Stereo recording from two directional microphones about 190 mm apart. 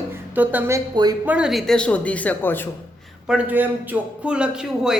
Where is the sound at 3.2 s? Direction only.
5° right (ahead or behind).